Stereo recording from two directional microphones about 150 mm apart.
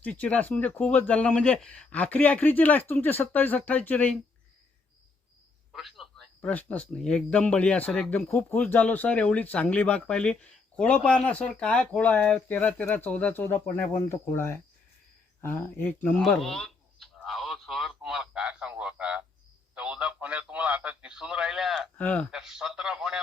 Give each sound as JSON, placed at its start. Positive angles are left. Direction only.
{"t": 0.0, "sound": "speech", "side_deg": 10}
{"t": 5.7, "sound": "a sound", "side_deg": 0}
{"t": 6.4, "sound": "a man's voice", "side_deg": 10}
{"t": 21.9, "sound": "speech", "side_deg": 10}
{"t": 22.3, "sound": "a man's voice", "side_deg": 0}